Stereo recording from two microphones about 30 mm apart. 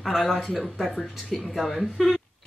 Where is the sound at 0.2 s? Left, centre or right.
Centre.